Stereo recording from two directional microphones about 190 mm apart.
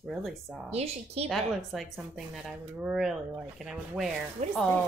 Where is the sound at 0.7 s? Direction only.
35° right (ahead or behind).